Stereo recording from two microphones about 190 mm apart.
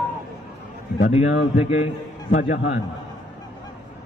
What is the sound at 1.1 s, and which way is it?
A man's voice, 35° left (ahead or behind).